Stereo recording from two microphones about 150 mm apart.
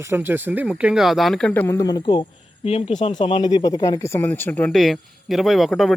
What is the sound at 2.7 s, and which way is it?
Speech, 40° left (ahead or behind).